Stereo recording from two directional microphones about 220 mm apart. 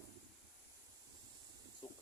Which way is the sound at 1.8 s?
20° left (ahead or behind).